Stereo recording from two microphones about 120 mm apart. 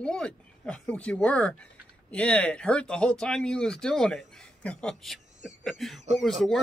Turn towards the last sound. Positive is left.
turn(degrees=0)  # may be behind; listen again after turning